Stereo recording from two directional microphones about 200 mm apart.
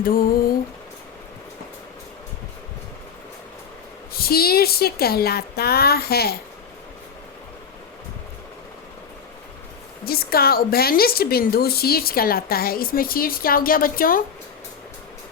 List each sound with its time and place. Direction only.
0.0 s a woman's voice: 45° left (ahead or behind)
4.1 s a woman's voice: 50° left (ahead or behind)
10.1 s a woman's voice: 50° left (ahead or behind)